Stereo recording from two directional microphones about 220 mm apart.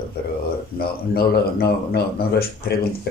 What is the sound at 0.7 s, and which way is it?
Speech, 45° left (ahead or behind).